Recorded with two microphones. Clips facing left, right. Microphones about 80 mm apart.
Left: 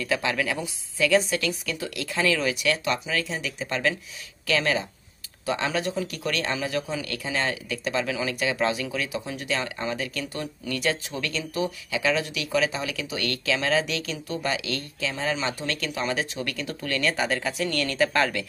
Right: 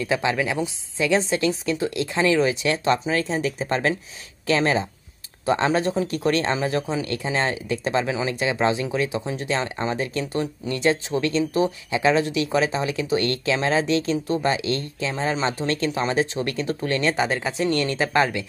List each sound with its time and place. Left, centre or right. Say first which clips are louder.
0.0 s a man's voice: right 3 dB; right